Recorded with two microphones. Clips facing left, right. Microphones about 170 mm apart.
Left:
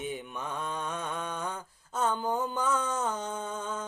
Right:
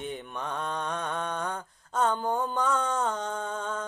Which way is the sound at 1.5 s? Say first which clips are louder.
Right 4 dB; 60° right (ahead or behind).